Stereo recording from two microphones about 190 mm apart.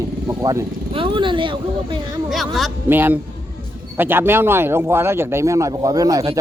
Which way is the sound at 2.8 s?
10° right (ahead or behind).